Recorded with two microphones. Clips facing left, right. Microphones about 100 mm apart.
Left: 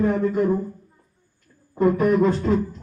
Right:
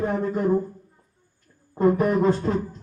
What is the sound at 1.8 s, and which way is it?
Speech, 30° right (ahead or behind).